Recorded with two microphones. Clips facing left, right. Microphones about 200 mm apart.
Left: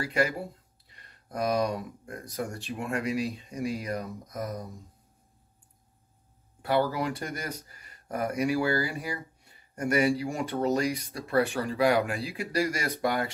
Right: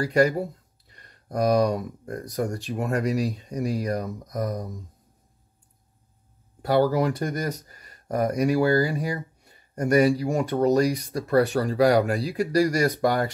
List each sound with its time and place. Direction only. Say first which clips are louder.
0.0 s speech: right 7 dB; 40° right (ahead or behind)
6.6 s speech: right 6 dB; 40° right (ahead or behind)